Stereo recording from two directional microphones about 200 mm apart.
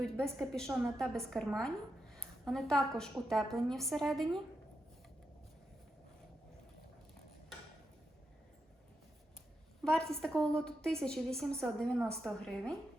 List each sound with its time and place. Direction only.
0.0 s a woman's voice: centre (ahead or behind)
9.8 s a woman's voice: 5° left (ahead or behind)